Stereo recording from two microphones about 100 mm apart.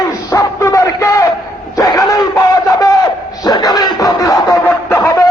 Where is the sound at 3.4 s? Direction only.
40° left (ahead or behind).